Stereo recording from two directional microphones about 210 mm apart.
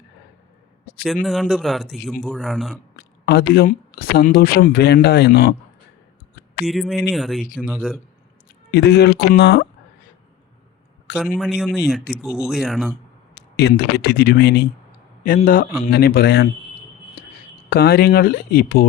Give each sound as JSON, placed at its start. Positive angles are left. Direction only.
{"t": 1.0, "sound": "a man's voice", "side_deg": 0}
{"t": 3.2, "sound": "speech", "side_deg": 50}
{"t": 6.7, "sound": "a man's voice", "side_deg": 0}
{"t": 8.7, "sound": "speech", "side_deg": 50}
{"t": 11.2, "sound": "a man's voice", "side_deg": 0}
{"t": 13.3, "sound": "a man's voice", "side_deg": 55}
{"t": 17.7, "sound": "speech", "side_deg": 45}